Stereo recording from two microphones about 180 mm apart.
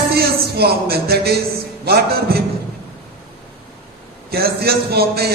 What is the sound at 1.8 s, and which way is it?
Speech, 60° right (ahead or behind).